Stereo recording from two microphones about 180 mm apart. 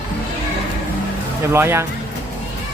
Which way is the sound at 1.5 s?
15° right (ahead or behind).